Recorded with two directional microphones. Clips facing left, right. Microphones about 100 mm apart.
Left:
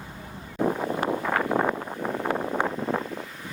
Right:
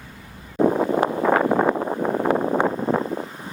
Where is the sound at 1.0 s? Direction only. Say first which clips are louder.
Right 7 dB; 35° right (ahead or behind).